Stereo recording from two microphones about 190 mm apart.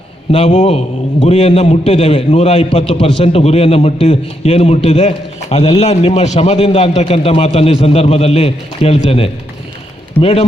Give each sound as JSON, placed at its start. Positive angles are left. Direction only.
{"t": 0.3, "sound": "a man's voice", "side_deg": 30}